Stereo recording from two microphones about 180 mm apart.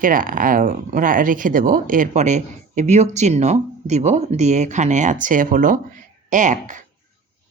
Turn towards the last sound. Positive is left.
turn(degrees=-45)  # may be behind; listen again after turning